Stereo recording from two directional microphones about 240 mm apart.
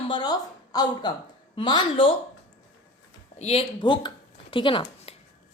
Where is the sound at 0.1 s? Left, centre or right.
Centre.